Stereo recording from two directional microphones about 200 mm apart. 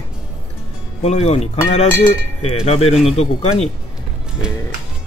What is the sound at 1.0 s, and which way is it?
A man's voice, 30° left (ahead or behind).